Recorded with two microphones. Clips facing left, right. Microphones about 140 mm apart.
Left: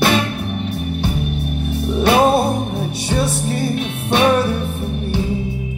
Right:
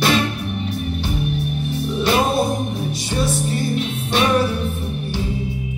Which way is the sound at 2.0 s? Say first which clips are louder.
Left 5 dB; 60° left (ahead or behind).